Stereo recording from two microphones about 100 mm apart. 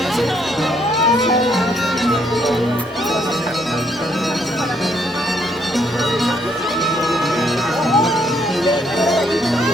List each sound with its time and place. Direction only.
0.9 s music: centre (ahead or behind)
7.9 s music: centre (ahead or behind)